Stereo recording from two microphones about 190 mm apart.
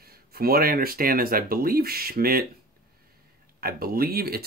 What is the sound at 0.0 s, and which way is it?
Speech, 55° right (ahead or behind).